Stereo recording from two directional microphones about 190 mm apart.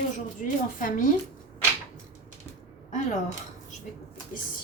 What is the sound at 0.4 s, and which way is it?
Speech, 40° left (ahead or behind).